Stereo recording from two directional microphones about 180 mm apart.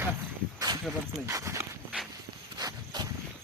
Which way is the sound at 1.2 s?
15° right (ahead or behind).